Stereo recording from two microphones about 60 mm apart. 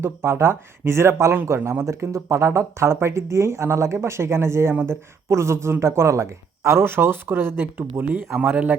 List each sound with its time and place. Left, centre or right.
0.0 s speech: right
8.4 s speech: right